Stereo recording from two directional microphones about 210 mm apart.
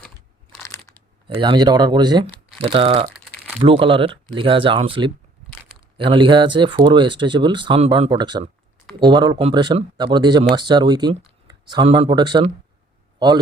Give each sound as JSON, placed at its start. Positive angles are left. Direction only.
{"t": 1.3, "sound": "a man's voice", "side_deg": -20}